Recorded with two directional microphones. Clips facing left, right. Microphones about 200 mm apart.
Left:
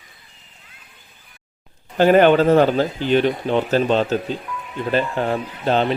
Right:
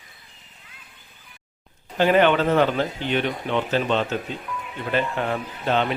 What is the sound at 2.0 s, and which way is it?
Speech, 40° left (ahead or behind).